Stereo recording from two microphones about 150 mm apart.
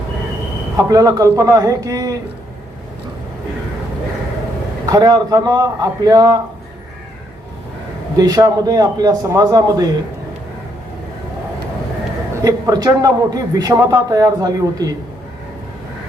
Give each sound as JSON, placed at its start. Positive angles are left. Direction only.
{"t": 0.8, "sound": "a man's voice", "side_deg": -25}
{"t": 4.9, "sound": "a man's voice", "side_deg": -25}
{"t": 8.1, "sound": "a man's voice", "side_deg": -25}
{"t": 12.3, "sound": "a man's voice", "side_deg": -20}